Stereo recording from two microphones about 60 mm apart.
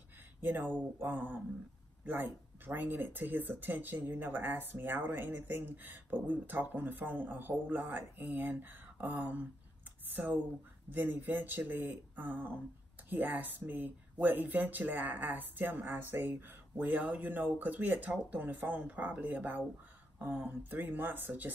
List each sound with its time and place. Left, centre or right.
0.4 s speech: right